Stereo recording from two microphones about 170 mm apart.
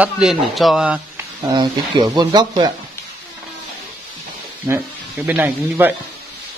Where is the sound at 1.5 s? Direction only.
25° right (ahead or behind).